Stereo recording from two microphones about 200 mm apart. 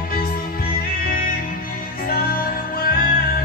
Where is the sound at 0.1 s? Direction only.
50° left (ahead or behind).